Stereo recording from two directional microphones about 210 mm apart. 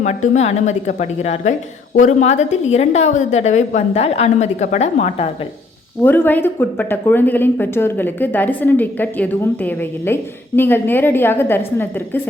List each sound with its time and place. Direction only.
0.0 s a woman's voice: 35° left (ahead or behind)
6.0 s speech: 10° left (ahead or behind)